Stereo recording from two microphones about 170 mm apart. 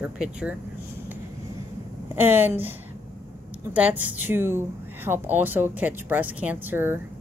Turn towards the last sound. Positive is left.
turn(degrees=-15)  # may be behind; listen again after turning